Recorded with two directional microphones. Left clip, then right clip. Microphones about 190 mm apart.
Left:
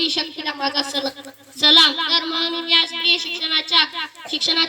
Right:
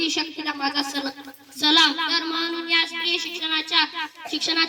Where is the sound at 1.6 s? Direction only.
60° left (ahead or behind).